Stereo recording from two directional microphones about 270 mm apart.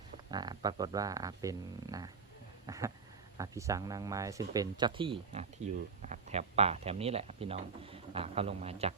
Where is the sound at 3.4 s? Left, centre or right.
Centre.